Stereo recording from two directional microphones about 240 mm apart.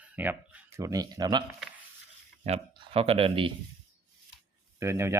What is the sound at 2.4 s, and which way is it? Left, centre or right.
Speech, right.